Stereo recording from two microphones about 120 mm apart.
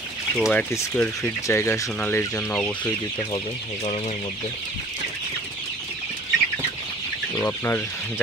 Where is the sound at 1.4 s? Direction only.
25° left (ahead or behind).